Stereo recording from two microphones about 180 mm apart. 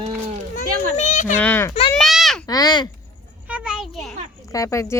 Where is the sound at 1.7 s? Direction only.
30° left (ahead or behind).